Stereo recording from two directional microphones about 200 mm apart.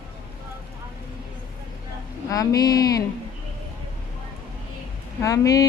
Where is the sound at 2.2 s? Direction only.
15° left (ahead or behind).